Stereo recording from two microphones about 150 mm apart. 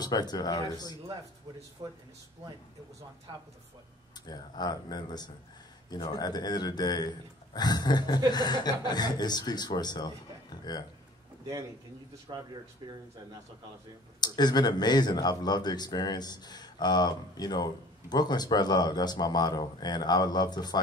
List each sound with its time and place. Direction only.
0.0 s speech: 25° left (ahead or behind)
1.8 s speech: 20° right (ahead or behind)
4.3 s speech: 25° left (ahead or behind)
12.3 s speech: 30° right (ahead or behind)
14.2 s speech: 25° left (ahead or behind)